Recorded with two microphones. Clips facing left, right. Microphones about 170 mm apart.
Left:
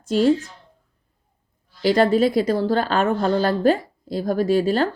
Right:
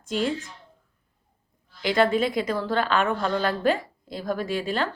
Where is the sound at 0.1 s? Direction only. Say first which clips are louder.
Left 9 dB; 40° left (ahead or behind).